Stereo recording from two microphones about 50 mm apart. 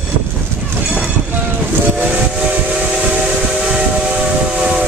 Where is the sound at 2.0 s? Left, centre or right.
Right.